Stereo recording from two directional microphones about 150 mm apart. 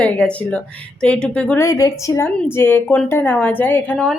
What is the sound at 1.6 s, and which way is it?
A woman's voice, 20° left (ahead or behind).